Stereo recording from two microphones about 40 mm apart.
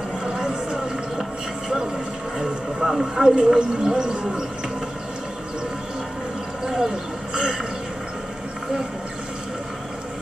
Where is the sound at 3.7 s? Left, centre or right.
Centre.